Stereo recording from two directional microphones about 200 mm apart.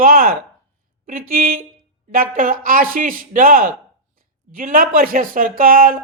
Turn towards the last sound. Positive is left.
turn(degrees=-45)  # may be behind; listen again after turning